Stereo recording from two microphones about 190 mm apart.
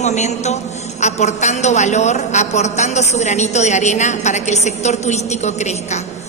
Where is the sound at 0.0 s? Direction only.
35° left (ahead or behind).